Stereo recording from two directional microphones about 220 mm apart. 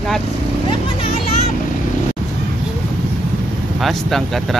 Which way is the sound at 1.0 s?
30° left (ahead or behind).